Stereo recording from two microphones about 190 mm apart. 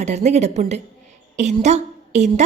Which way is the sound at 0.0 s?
35° right (ahead or behind).